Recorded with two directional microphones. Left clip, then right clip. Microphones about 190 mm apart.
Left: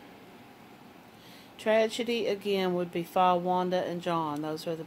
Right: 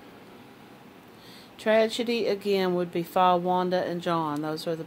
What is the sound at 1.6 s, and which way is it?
Speech, 20° right (ahead or behind).